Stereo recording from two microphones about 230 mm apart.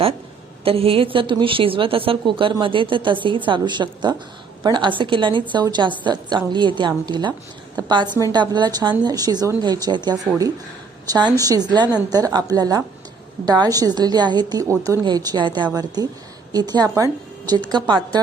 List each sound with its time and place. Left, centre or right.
0.6 s a woman's voice: right